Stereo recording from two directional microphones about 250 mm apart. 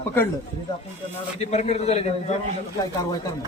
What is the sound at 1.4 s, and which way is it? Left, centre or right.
Speech, left.